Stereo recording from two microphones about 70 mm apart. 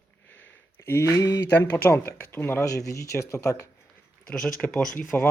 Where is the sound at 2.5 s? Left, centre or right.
Left.